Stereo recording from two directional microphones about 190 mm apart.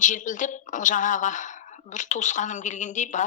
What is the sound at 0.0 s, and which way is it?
A woman's voice, 40° left (ahead or behind).